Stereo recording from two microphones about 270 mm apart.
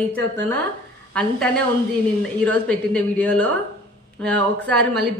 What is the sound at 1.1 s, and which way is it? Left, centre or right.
A woman's voice, centre.